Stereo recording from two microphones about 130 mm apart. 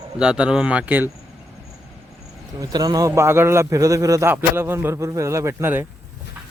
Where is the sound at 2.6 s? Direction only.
30° right (ahead or behind).